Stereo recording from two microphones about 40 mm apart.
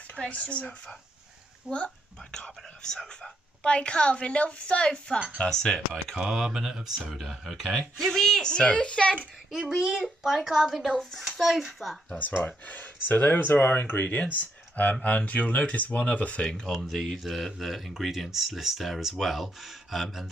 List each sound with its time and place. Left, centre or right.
0.3 s speech: left
1.7 s speech: right
2.3 s speech: centre
5.5 s speech: centre
6.1 s speech: centre
7.2 s speech: centre
7.7 s speech: centre
9.5 s speech: centre
10.0 s speech: centre
11.0 s speech: centre
12.4 s speech: left
13.4 s speech: left
15.0 s speech: left
16.6 s speech: centre